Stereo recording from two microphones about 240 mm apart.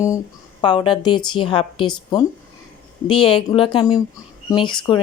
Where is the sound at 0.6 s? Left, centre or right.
Centre.